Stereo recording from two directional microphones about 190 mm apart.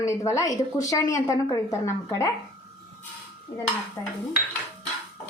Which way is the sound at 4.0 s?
15° left (ahead or behind).